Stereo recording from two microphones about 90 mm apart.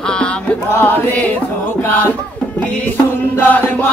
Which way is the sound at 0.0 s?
10° left (ahead or behind).